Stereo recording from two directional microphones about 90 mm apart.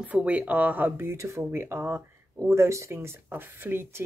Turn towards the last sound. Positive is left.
turn(degrees=-25)  # may be behind; listen again after turning